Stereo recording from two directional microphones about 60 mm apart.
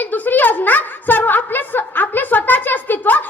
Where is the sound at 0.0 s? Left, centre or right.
Left.